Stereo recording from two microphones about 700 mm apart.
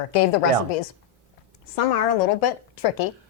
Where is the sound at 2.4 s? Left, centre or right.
Left.